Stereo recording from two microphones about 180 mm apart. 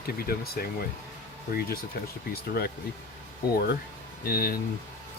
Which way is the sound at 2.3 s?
60° left (ahead or behind).